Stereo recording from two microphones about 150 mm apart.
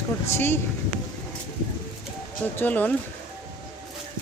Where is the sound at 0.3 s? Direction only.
15° left (ahead or behind).